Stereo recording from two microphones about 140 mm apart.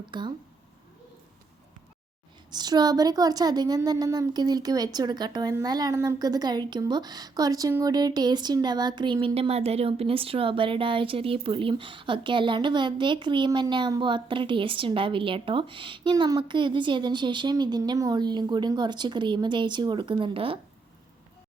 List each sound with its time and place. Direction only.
0.1 s speech: 35° right (ahead or behind)
2.5 s speech: 30° right (ahead or behind)
9.2 s speech: 45° right (ahead or behind)